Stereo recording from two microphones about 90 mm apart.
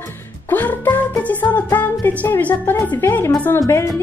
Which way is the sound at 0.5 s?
20° left (ahead or behind).